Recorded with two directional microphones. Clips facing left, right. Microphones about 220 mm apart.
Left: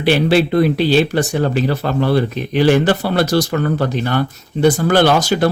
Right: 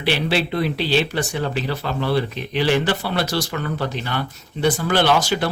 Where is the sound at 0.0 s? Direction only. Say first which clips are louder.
Left 8 dB; 45° left (ahead or behind).